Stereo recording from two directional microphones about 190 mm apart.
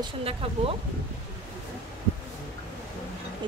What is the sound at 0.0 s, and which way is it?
Speech, 30° right (ahead or behind).